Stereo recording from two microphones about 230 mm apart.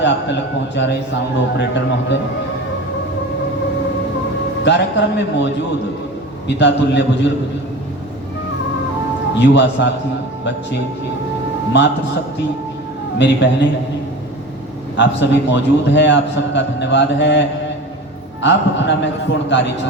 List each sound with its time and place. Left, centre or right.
1.5 s a man's voice: left
4.6 s a man's voice: left
6.6 s a man's voice: left
9.4 s a man's voice: left
11.7 s a man's voice: left
14.9 s a man's voice: left
18.4 s a man's voice: left